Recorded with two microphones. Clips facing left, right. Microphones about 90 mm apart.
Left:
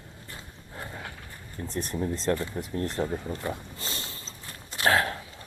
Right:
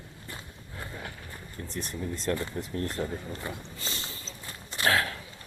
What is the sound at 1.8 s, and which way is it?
Speech, 40° left (ahead or behind).